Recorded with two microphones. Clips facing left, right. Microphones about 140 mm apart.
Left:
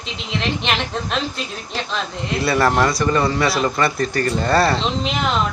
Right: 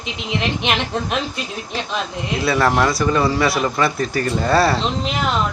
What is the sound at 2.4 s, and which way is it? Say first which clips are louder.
Speech: even; centre (ahead or behind).